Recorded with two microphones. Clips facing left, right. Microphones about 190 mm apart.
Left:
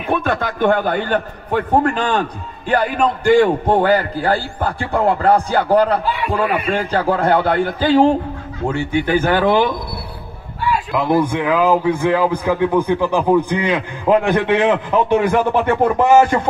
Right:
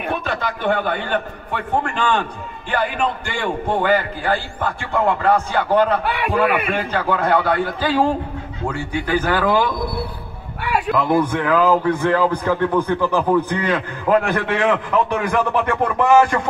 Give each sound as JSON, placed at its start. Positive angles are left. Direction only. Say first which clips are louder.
{"t": 0.1, "sound": "a man's voice", "louder": "left 7 dB", "side_deg": 50}
{"t": 6.0, "sound": "a man's voice", "louder": "left 1 dB", "side_deg": -70}
{"t": 6.7, "sound": "a man's voice", "louder": "left 3 dB", "side_deg": 35}
{"t": 11.1, "sound": "a man's voice", "louder": "left 2 dB", "side_deg": 10}